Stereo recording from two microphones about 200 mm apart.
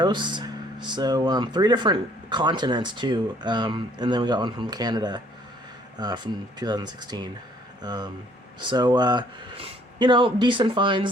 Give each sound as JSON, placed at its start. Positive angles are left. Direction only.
{"t": 0.0, "sound": "speech", "side_deg": -25}